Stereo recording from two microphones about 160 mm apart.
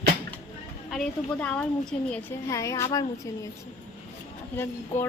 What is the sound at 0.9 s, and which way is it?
A woman's voice, centre (ahead or behind).